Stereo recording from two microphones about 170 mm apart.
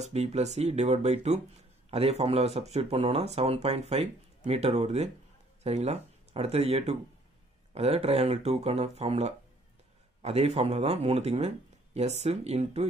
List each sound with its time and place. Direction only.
0.0 s speech: 40° right (ahead or behind)